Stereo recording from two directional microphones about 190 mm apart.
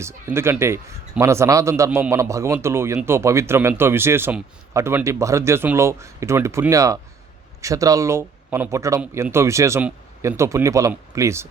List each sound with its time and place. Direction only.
0.0 s a man's voice: 15° right (ahead or behind)